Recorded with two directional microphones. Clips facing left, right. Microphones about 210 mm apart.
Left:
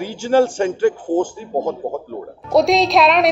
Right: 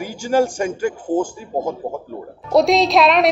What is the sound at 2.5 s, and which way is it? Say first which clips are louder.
Speech: even; centre (ahead or behind).